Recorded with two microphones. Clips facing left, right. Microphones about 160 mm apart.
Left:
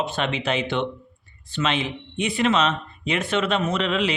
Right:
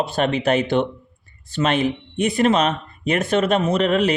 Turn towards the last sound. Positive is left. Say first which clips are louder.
# right 5 dB
turn(degrees=-45)  # may be behind; listen again after turning